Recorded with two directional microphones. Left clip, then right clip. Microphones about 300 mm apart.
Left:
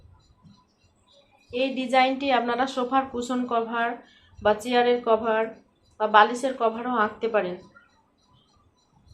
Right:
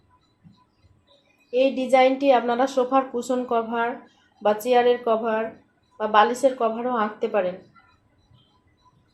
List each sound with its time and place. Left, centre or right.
1.5 s a woman's voice: centre